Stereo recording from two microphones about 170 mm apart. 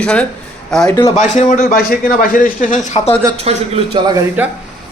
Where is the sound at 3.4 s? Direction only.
35° right (ahead or behind).